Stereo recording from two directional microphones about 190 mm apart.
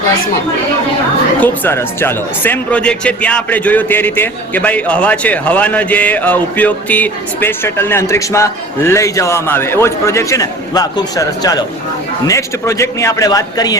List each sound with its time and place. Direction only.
1.4 s speech: 10° left (ahead or behind)